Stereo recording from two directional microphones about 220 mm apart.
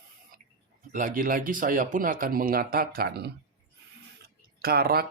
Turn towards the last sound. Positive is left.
turn(degrees=-45)  # may be behind; listen again after turning